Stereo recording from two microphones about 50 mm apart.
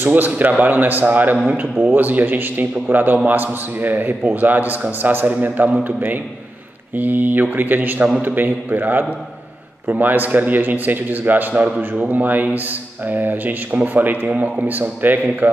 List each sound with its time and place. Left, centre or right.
0.0 s a man's voice: right
0.3 s a man's voice: right
11.7 s a man's voice: right
12.1 s a man's voice: right